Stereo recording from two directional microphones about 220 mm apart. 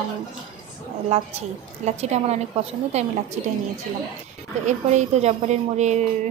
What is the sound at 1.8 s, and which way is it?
A woman's voice, 30° right (ahead or behind).